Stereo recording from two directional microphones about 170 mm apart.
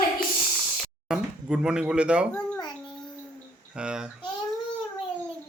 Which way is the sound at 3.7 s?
5° right (ahead or behind).